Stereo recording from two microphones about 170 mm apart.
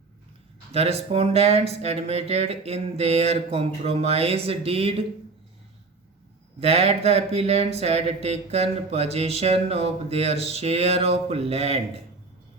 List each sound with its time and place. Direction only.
0.7 s speech: 35° right (ahead or behind)
6.6 s speech: 40° right (ahead or behind)